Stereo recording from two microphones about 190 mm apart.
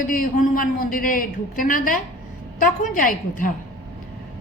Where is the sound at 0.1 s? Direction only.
45° left (ahead or behind).